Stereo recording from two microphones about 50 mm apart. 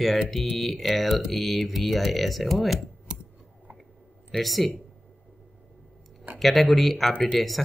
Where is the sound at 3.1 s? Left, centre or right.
Right.